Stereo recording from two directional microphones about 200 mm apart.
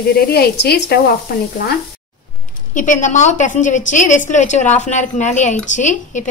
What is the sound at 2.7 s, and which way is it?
A woman's voice, 40° left (ahead or behind).